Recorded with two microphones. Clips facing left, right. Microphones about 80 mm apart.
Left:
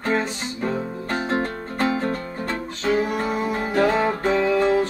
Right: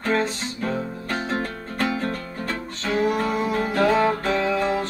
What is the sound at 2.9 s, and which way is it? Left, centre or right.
Music, centre.